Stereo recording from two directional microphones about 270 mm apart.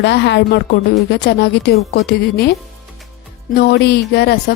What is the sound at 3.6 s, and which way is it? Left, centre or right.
Speech, left.